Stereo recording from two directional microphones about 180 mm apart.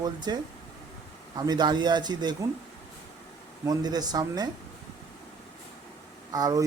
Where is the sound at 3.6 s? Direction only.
20° right (ahead or behind).